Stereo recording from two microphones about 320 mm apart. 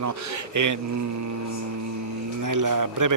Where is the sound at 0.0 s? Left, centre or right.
Right.